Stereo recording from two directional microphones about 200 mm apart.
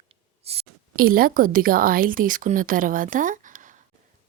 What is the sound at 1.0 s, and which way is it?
Speech, 45° right (ahead or behind).